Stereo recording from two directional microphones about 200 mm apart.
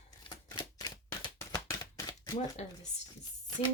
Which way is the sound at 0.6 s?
15° left (ahead or behind).